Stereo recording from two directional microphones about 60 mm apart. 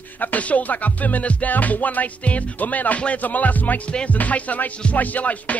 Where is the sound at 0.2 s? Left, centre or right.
Left.